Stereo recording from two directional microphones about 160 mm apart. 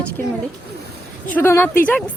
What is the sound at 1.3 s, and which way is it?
Speech, 15° left (ahead or behind).